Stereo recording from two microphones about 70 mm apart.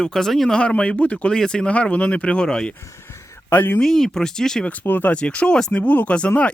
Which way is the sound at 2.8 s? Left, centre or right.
Left.